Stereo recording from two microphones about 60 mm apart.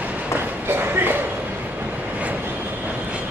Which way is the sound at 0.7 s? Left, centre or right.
Right.